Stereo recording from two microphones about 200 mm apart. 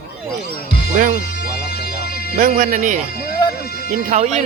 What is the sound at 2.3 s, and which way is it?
Speech, 40° right (ahead or behind).